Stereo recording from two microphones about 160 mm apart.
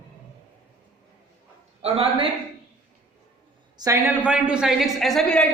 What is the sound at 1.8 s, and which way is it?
Speech, 35° right (ahead or behind).